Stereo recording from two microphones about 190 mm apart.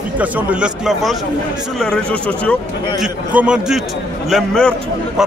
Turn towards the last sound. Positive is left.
turn(degrees=0)  # may be behind; listen again after turning